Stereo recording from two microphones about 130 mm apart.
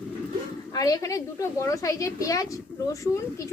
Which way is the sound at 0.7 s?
30° left (ahead or behind).